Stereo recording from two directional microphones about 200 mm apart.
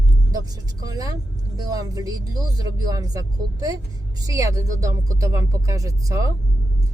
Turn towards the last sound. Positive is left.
turn(degrees=-15)  # may be behind; listen again after turning